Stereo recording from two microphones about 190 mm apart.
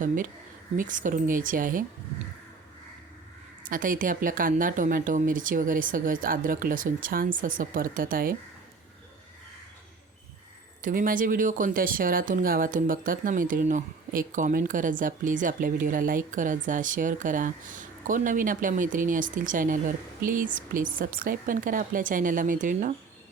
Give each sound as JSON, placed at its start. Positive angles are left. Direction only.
{"t": 0.8, "sound": "speech", "side_deg": -45}
{"t": 3.6, "sound": "speech", "side_deg": -45}
{"t": 10.8, "sound": "speech", "side_deg": -45}